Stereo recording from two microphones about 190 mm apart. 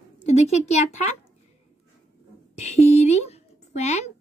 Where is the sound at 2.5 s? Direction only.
35° left (ahead or behind).